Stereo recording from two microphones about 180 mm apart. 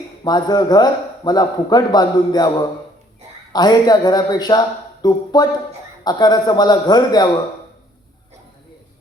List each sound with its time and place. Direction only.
0.3 s a man's voice: 20° left (ahead or behind)